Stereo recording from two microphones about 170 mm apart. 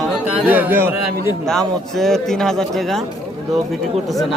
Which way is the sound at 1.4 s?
Centre (ahead or behind).